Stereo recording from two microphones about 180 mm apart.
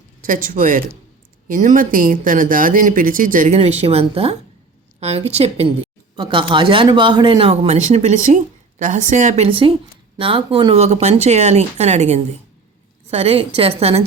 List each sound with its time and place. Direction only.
0.3 s speech: 50° right (ahead or behind)